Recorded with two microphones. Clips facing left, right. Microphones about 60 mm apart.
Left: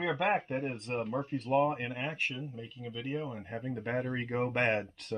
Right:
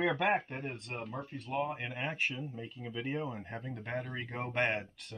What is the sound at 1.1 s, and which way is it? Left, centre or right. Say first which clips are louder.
Speech: left 7 dB; left.